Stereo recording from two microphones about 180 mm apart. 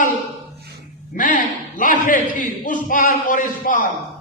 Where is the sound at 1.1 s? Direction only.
50° left (ahead or behind).